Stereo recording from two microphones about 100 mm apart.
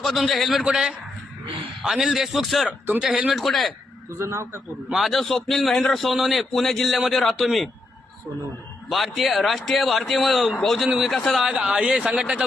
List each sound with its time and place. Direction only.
0.0 s a man's voice: centre (ahead or behind)
4.2 s a man's voice: 30° right (ahead or behind)
4.9 s a man's voice: centre (ahead or behind)
8.9 s a man's voice: centre (ahead or behind)